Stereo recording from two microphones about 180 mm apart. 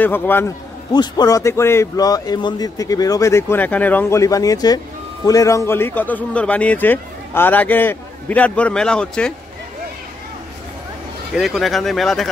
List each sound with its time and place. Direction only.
0.0 s a man's voice: 10° left (ahead or behind)
0.9 s a man's voice: 20° left (ahead or behind); by 9.3 s 5° left (ahead or behind)
11.3 s speech: centre (ahead or behind)